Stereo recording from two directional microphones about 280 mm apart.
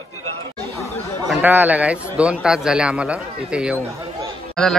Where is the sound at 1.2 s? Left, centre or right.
Centre.